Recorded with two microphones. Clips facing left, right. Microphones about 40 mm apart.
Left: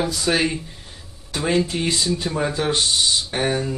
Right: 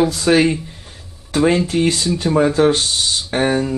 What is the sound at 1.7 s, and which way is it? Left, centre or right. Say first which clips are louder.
Speech: right 8 dB; centre.